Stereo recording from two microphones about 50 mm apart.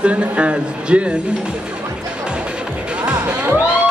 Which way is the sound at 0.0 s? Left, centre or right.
Right.